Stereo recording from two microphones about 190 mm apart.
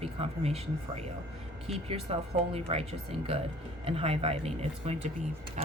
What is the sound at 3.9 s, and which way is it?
Speech, 30° right (ahead or behind).